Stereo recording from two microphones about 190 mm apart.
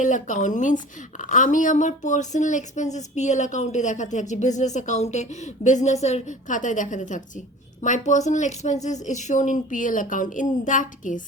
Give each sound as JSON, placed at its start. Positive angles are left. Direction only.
{"t": 0.0, "sound": "a woman's voice", "side_deg": 40}